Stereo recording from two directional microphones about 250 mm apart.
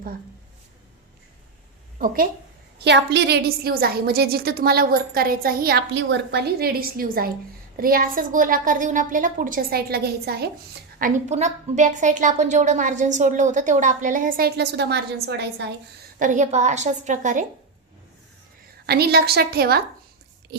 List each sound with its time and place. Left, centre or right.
2.7 s a woman's voice: right
11.0 s a woman's voice: right
16.1 s a woman's voice: right
18.9 s a woman's voice: right